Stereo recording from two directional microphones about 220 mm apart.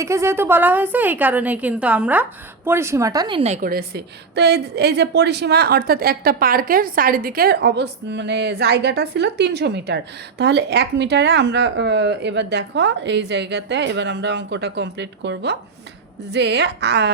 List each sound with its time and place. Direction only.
0.0 s a woman's voice: 15° right (ahead or behind); by 17.1 s 50° right (ahead or behind)